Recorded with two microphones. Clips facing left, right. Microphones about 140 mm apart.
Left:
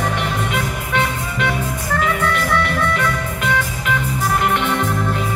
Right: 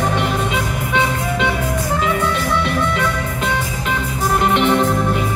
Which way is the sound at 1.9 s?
20° right (ahead or behind).